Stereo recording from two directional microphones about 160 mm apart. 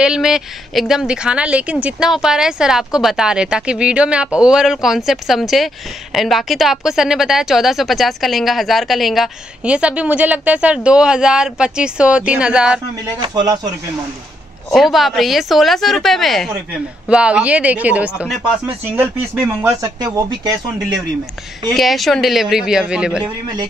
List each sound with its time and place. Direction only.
0.0 s a woman's voice: 5° right (ahead or behind)
13.2 s speech: 25° right (ahead or behind)
14.7 s a woman's voice: centre (ahead or behind); by 20.5 s 25° right (ahead or behind)
21.7 s a woman's voice: centre (ahead or behind)